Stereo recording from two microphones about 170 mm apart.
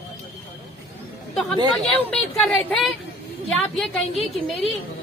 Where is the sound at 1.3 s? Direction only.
Centre (ahead or behind).